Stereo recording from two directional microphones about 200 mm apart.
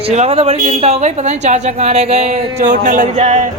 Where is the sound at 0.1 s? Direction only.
30° right (ahead or behind).